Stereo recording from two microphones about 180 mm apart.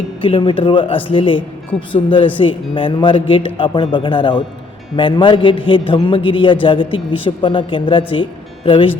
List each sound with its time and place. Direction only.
0.2 s a man's voice: 30° left (ahead or behind)